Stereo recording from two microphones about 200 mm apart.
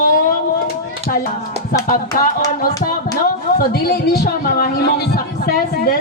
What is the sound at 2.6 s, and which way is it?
Speech, 45° left (ahead or behind).